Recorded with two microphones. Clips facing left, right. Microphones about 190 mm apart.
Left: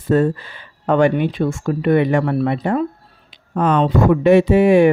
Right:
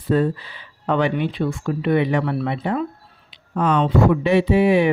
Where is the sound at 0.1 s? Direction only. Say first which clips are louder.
Left 3 dB; 45° left (ahead or behind).